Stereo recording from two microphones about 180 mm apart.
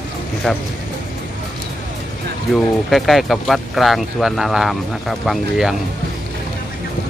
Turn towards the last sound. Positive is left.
turn(degrees=0)  # may be behind; listen again after turning